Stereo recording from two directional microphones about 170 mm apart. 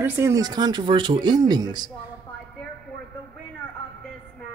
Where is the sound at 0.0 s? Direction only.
15° right (ahead or behind).